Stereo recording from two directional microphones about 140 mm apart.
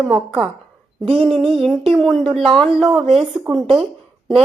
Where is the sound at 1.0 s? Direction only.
40° right (ahead or behind).